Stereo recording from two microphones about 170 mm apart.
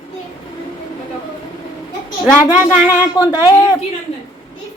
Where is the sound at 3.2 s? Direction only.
20° left (ahead or behind).